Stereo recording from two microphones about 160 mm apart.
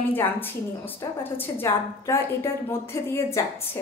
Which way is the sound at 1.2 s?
15° left (ahead or behind).